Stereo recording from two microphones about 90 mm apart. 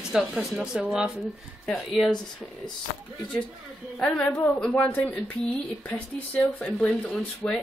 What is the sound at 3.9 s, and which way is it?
Speech, 5° left (ahead or behind).